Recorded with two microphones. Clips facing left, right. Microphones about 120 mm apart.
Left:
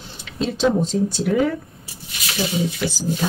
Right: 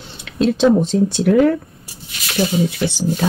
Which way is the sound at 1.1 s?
60° right (ahead or behind).